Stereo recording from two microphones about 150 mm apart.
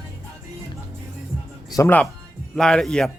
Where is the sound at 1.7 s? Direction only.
20° left (ahead or behind).